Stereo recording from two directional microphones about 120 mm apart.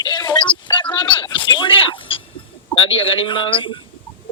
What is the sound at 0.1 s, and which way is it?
Music, 40° left (ahead or behind).